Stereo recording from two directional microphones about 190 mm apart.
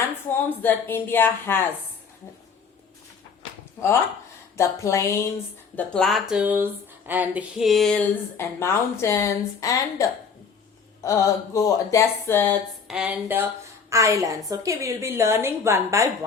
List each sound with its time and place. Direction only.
0.6 s a woman's voice: 10° left (ahead or behind)
4.5 s a woman's voice: 15° left (ahead or behind)
5.7 s a woman's voice: 5° left (ahead or behind)
12.9 s a woman's voice: 5° right (ahead or behind)